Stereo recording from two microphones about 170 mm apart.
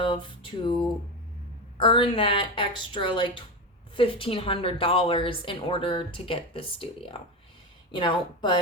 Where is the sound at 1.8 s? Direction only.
30° left (ahead or behind).